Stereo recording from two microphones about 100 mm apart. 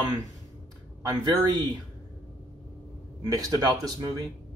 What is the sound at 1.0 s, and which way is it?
Speech, 45° right (ahead or behind).